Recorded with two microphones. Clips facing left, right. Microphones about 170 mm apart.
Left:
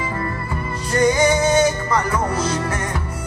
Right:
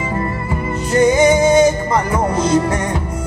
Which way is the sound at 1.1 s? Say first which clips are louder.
Right 5 dB; 25° right (ahead or behind).